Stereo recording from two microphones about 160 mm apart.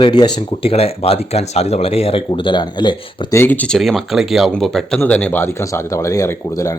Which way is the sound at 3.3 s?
15° left (ahead or behind).